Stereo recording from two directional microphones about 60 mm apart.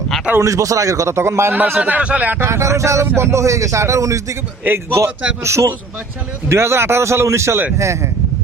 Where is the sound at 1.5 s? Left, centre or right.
Right.